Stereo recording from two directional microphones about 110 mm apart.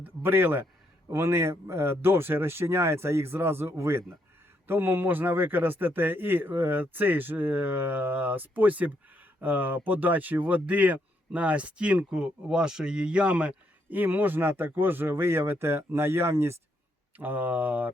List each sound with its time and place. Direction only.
0.0 s speech: 20° right (ahead or behind)